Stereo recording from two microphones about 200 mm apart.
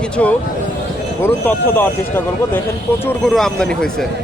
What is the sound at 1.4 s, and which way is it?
Speech, 10° left (ahead or behind).